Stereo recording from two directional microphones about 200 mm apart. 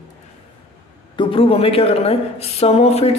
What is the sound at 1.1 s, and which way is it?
A man's voice, 25° left (ahead or behind).